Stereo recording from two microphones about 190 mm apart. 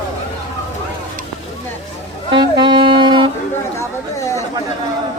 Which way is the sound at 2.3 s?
25° right (ahead or behind).